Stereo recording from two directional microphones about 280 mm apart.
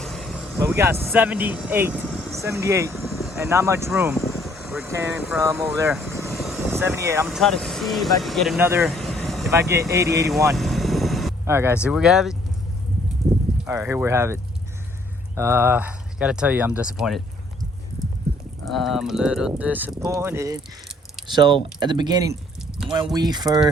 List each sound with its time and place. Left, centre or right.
0.0 s speech: centre
9.5 s speech: centre
10.6 s vehicle: centre
13.7 s speech: centre
15.4 s speech: centre
18.6 s speech: centre